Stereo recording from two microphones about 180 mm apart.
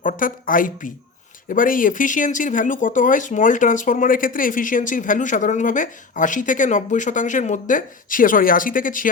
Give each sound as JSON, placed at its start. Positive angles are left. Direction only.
{"t": 0.0, "sound": "speech", "side_deg": 50}